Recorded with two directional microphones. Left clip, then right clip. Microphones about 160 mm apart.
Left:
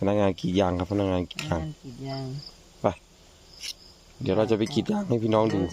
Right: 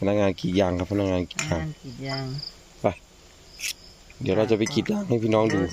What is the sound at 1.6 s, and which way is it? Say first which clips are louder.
Cricket: right 2 dB; 20° left (ahead or behind).